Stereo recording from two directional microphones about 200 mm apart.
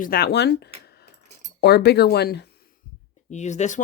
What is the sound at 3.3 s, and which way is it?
Speech, 35° left (ahead or behind).